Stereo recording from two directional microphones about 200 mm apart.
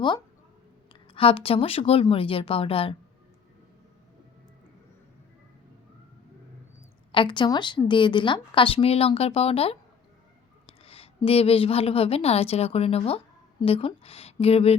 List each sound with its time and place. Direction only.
1.1 s speech: 25° left (ahead or behind)
7.1 s a woman's voice: 25° left (ahead or behind)